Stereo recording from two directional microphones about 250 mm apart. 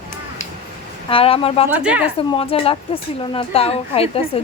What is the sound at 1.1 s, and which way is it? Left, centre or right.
Speech, left.